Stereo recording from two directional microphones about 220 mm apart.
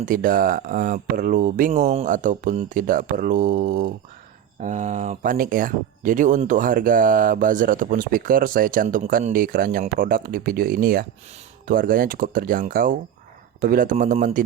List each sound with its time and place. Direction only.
0.0 s speech: 40° right (ahead or behind)